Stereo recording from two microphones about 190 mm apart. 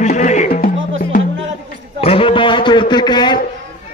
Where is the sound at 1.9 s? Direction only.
30° left (ahead or behind).